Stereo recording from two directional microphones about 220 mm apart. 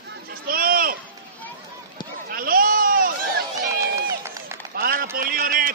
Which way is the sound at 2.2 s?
40° right (ahead or behind).